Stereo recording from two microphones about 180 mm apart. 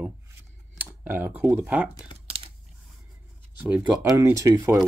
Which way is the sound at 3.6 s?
10° right (ahead or behind).